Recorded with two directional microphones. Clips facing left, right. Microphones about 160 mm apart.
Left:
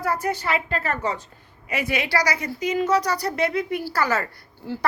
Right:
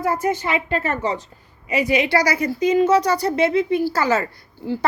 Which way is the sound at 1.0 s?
20° right (ahead or behind).